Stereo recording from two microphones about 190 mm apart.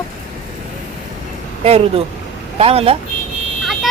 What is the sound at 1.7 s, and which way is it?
Speech, 30° right (ahead or behind).